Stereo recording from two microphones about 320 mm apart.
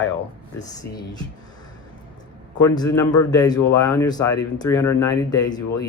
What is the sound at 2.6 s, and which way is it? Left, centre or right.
A man's voice, centre.